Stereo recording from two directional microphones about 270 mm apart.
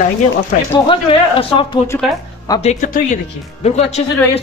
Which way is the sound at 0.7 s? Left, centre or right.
Centre.